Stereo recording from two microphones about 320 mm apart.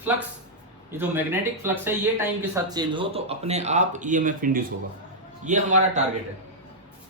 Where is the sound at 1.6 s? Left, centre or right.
Centre; by 6.0 s right.